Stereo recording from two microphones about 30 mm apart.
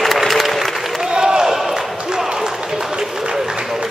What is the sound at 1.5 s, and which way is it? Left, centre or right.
Basketball bounce, centre.